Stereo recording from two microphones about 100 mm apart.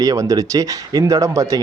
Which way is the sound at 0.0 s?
35° right (ahead or behind).